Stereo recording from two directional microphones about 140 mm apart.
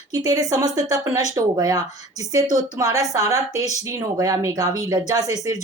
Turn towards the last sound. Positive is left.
turn(degrees=-25)  # may be behind; listen again after turning